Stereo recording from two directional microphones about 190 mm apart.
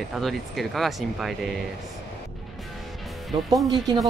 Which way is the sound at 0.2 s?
Centre (ahead or behind).